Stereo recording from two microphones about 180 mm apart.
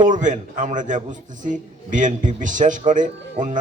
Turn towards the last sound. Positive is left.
turn(degrees=-45)  # may be behind; listen again after turning